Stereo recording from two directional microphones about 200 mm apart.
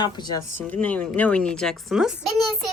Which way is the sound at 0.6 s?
10° left (ahead or behind).